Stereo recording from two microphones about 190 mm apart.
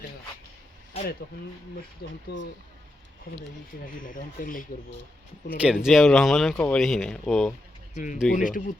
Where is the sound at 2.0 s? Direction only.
55° left (ahead or behind).